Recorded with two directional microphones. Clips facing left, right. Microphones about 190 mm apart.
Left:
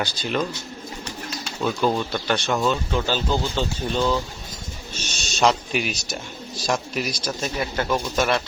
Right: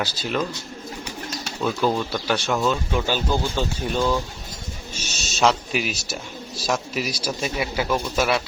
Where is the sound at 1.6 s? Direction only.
Centre (ahead or behind).